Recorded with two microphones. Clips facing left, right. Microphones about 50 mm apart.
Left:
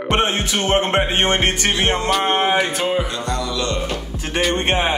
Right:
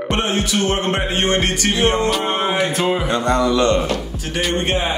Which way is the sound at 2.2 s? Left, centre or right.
Left.